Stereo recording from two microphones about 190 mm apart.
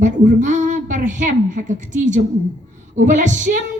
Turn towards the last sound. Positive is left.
turn(degrees=-40)  # may be behind; listen again after turning